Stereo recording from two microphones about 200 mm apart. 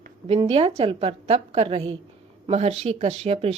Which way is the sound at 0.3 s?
30° right (ahead or behind).